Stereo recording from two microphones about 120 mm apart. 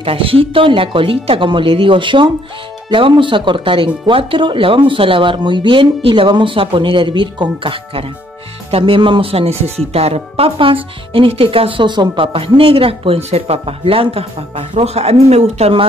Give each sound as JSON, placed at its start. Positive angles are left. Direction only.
{"t": 0.0, "sound": "speech", "side_deg": -50}